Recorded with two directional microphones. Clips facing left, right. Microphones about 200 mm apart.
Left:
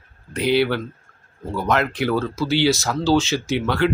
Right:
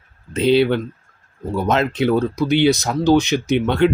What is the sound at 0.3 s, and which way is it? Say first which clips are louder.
Speech: right 4 dB; 20° right (ahead or behind).